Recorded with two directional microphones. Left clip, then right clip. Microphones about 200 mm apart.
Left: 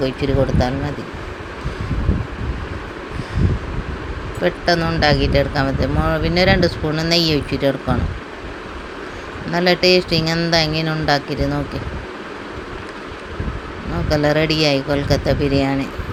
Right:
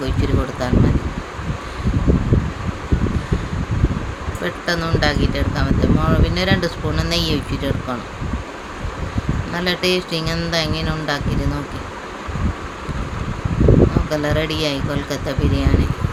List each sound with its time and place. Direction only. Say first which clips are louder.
0.0 s speech: left 4 dB; 15° left (ahead or behind)
4.4 s speech: left 5 dB; 20° left (ahead or behind)
9.6 s speech: left 5 dB; 20° left (ahead or behind)
14.1 s speech: left 4 dB; 20° left (ahead or behind)